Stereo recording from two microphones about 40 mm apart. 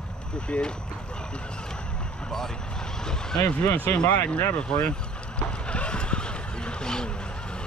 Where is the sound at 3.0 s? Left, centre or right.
Centre.